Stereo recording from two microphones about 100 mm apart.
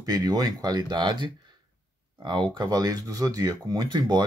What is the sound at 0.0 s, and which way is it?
Speech, 40° right (ahead or behind).